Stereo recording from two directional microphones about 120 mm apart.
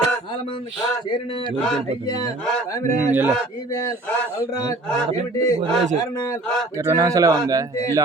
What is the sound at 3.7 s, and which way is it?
Speech, 25° left (ahead or behind).